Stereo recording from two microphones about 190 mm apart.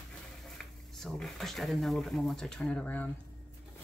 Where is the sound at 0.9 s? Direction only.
Centre (ahead or behind).